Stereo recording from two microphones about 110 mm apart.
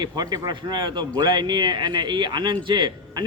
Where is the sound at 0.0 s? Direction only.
40° right (ahead or behind).